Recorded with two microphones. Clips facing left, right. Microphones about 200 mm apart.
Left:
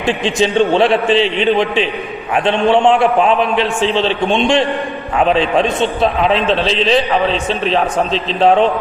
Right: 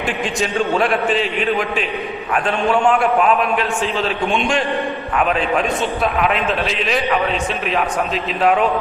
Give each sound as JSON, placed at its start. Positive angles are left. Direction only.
{"t": 0.7, "sound": "a man's voice", "side_deg": 30}